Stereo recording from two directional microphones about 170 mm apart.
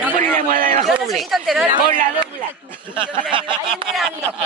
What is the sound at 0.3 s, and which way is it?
Speech, 50° right (ahead or behind).